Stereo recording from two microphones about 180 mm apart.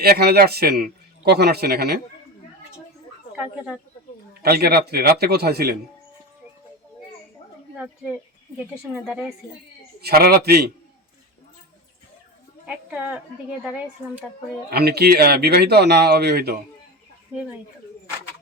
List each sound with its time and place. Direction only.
0.0 s a man's voice: 60° right (ahead or behind)
3.3 s speech: 5° right (ahead or behind)
4.4 s a man's voice: 60° right (ahead or behind)
7.8 s speech: 5° right (ahead or behind)
10.0 s a man's voice: 60° right (ahead or behind)
12.6 s speech: 5° right (ahead or behind)
14.7 s a man's voice: 60° right (ahead or behind)